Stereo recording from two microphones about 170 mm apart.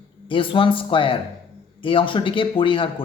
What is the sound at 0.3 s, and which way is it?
Speech, 30° left (ahead or behind).